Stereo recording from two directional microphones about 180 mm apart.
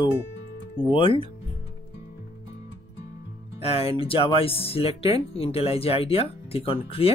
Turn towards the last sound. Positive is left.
turn(degrees=30)  # may be behind; listen again after turning